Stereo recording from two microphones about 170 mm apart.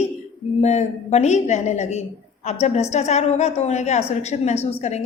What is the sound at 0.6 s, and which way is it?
A woman's voice, 40° left (ahead or behind).